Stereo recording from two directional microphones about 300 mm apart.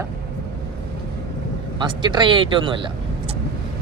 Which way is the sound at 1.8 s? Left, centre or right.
Centre.